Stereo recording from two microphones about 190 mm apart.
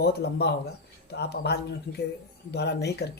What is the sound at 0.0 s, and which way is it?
Speech, 60° left (ahead or behind).